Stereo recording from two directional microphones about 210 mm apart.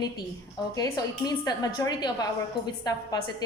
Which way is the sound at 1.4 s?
20° left (ahead or behind).